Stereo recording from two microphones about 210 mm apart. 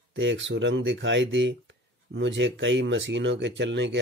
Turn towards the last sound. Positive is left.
turn(degrees=-60)  # may be behind; listen again after turning